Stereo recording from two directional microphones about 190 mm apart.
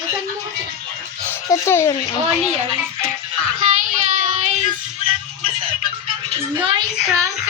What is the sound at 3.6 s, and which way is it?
Child singing, 40° right (ahead or behind).